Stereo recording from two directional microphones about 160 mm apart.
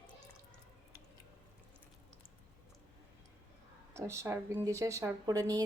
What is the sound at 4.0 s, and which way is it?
Speech, 15° right (ahead or behind).